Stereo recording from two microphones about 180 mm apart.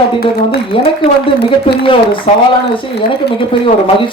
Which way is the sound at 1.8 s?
30° left (ahead or behind).